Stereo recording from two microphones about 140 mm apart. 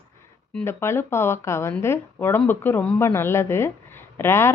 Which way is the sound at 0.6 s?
15° left (ahead or behind).